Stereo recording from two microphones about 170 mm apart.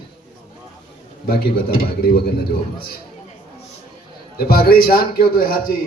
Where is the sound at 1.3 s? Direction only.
65° left (ahead or behind).